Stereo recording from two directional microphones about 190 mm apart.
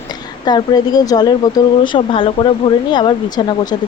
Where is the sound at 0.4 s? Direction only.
20° left (ahead or behind).